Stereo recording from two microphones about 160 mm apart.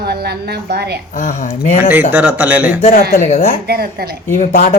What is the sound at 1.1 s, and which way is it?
Speech, 45° left (ahead or behind).